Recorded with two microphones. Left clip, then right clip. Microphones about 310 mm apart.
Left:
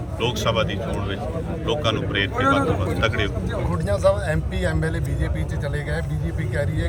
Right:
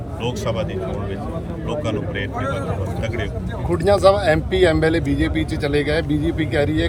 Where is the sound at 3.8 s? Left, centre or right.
Right.